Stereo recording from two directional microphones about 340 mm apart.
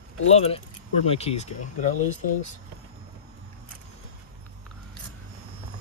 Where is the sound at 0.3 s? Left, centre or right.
Centre.